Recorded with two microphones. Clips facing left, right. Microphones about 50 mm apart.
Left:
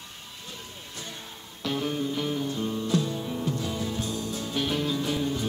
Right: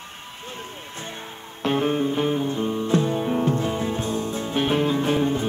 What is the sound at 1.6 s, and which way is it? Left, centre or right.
Music, right.